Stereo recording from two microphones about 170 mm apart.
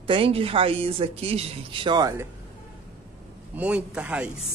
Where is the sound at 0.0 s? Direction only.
30° right (ahead or behind).